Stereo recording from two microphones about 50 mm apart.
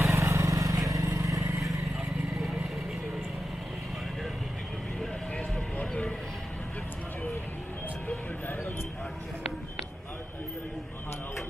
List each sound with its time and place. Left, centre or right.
0.1 s vehicle: right
1.7 s vehicle: centre
5.8 s music: left